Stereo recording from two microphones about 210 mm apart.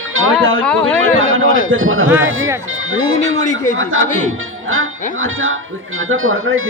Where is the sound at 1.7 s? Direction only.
75° right (ahead or behind).